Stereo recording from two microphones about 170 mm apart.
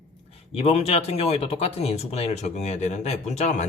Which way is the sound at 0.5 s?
35° left (ahead or behind).